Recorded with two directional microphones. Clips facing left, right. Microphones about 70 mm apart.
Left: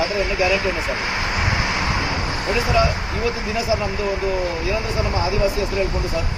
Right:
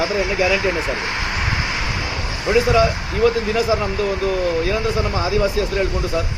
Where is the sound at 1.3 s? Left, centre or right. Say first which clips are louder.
Left 1 dB; centre.